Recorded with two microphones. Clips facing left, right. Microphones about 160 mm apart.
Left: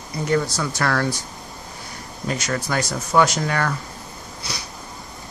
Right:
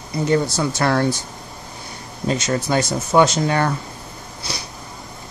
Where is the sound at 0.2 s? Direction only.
25° right (ahead or behind).